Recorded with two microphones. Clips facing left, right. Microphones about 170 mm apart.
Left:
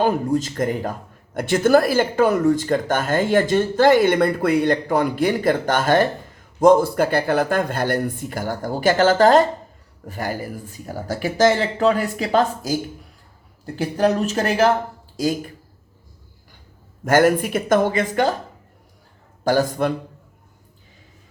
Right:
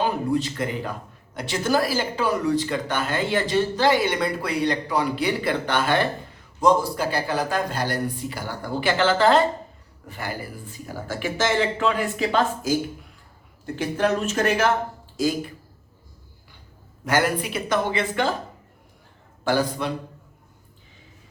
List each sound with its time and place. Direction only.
0.0 s a man's voice: 45° left (ahead or behind)
13.7 s speech: 35° left (ahead or behind)
17.1 s a man's voice: 45° left (ahead or behind)
19.5 s a man's voice: 45° left (ahead or behind)